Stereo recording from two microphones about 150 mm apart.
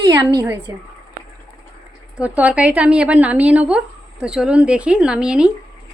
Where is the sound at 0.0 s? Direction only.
25° right (ahead or behind).